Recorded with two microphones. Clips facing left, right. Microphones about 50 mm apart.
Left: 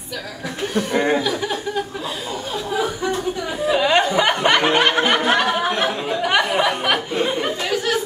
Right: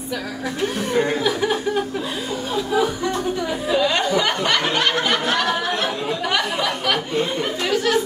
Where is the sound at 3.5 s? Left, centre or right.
Centre.